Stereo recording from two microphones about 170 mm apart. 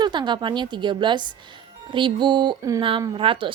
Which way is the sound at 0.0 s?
25° right (ahead or behind).